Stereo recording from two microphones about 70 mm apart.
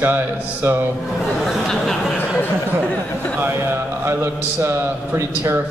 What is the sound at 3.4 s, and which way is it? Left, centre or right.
Speech, right.